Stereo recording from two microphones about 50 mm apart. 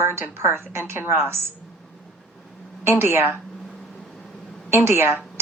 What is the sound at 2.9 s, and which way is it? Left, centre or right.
Speech, right.